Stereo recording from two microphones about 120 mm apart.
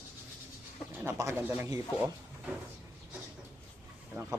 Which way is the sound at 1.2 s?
20° right (ahead or behind).